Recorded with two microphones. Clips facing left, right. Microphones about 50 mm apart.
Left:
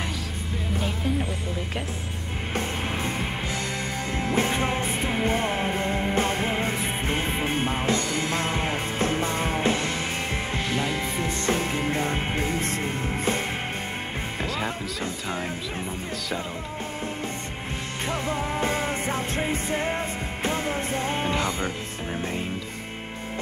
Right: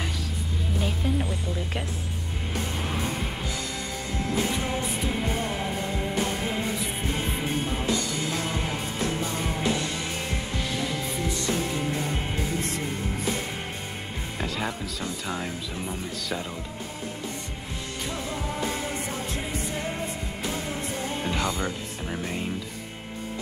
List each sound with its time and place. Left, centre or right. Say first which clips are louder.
1.0 s speech: left 1 dB; centre
4.3 s music: left 3 dB; left
14.4 s speech: even; centre
18.0 s music: left 5 dB; left
21.4 s speech: left 1 dB; left